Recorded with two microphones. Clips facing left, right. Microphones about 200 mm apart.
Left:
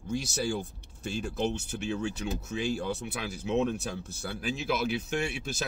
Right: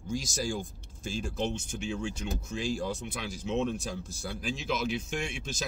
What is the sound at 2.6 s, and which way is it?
Speech, 60° left (ahead or behind).